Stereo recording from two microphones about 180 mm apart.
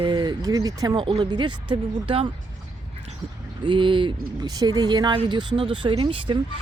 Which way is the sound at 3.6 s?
25° right (ahead or behind).